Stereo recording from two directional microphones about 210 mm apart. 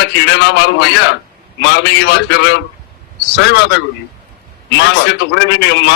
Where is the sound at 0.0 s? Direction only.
55° left (ahead or behind).